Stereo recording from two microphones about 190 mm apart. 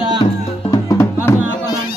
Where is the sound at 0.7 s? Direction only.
15° left (ahead or behind).